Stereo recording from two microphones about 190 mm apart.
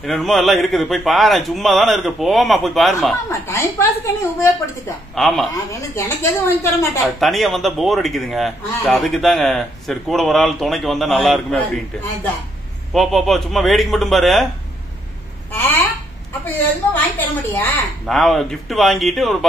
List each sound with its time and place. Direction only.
0.0 s a man's voice: centre (ahead or behind)
3.3 s a woman's voice: 15° left (ahead or behind)
5.1 s a man's voice: centre (ahead or behind)
5.8 s a woman's voice: 15° left (ahead or behind)
7.2 s a man's voice: centre (ahead or behind)
15.5 s a sound: 10° left (ahead or behind)
17.2 s a man's voice: 10° left (ahead or behind)